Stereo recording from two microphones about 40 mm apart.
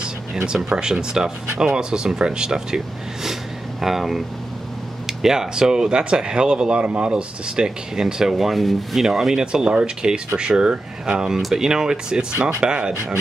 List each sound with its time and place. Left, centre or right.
0.7 s speech: centre
3.8 s speech: centre; by 12.9 s right